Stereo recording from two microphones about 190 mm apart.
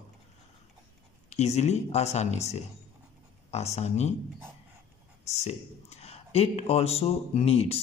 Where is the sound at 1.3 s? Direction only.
35° left (ahead or behind).